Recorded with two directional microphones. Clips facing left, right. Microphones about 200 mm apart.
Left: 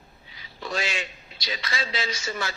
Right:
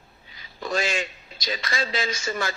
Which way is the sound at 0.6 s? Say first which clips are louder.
Right 4 dB; 45° right (ahead or behind).